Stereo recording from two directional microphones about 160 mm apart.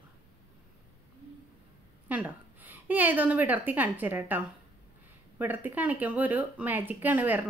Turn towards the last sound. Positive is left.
turn(degrees=-10)  # may be behind; listen again after turning